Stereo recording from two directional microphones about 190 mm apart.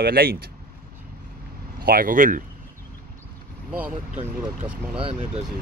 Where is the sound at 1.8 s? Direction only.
50° right (ahead or behind).